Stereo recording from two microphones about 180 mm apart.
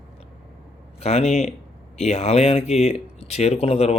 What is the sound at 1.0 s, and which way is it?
Speech, 35° left (ahead or behind).